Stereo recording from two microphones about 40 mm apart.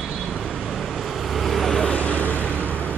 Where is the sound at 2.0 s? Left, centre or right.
Left.